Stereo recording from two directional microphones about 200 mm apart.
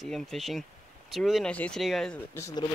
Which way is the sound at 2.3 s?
20° left (ahead or behind).